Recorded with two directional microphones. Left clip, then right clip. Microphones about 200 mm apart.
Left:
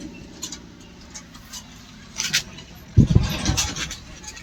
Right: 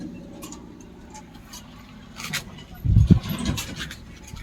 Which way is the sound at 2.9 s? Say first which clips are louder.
Left 7 dB; 30° left (ahead or behind).